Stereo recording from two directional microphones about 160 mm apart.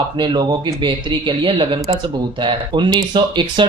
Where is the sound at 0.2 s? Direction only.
30° right (ahead or behind).